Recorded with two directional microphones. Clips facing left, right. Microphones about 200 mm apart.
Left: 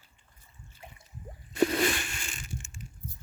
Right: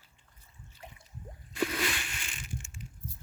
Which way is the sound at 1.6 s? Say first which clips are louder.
Left 7 dB; 40° left (ahead or behind).